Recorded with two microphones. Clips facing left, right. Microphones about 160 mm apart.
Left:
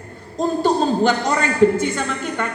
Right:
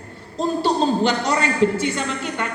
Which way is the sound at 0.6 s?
45° left (ahead or behind).